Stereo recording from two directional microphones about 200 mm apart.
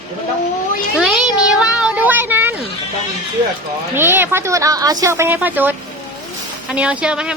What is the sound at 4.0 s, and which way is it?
A woman's voice, 10° right (ahead or behind).